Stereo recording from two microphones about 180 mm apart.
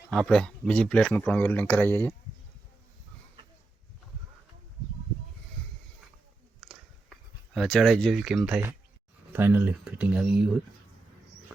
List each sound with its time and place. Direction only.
0.1 s speech: 5° left (ahead or behind)
6.6 s a sound: centre (ahead or behind)
9.3 s speech: 10° right (ahead or behind)